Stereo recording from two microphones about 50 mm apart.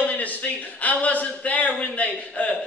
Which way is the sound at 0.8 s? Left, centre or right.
Left.